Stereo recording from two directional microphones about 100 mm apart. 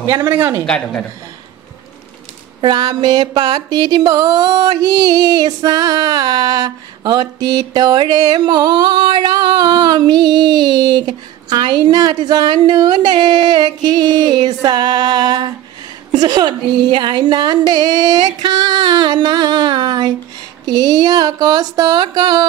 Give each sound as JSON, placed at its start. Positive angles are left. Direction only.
{"t": 0.2, "sound": "speech", "side_deg": -25}
{"t": 0.7, "sound": "a woman's voice", "side_deg": 10}
{"t": 2.6, "sound": "speech", "side_deg": -45}